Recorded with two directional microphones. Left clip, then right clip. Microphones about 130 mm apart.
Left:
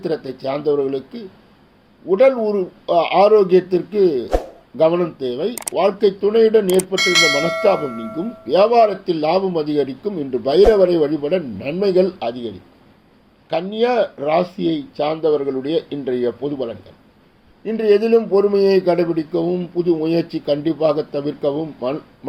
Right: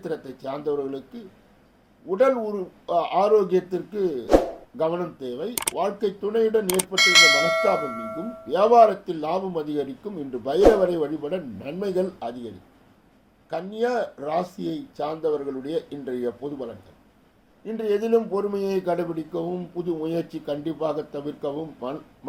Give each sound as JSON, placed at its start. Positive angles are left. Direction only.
{"t": 0.0, "sound": "speech", "side_deg": 20}
{"t": 6.7, "sound": "speech", "side_deg": 0}
{"t": 8.4, "sound": "speech", "side_deg": 20}
{"t": 13.5, "sound": "speech", "side_deg": 20}
{"t": 17.7, "sound": "speech", "side_deg": 20}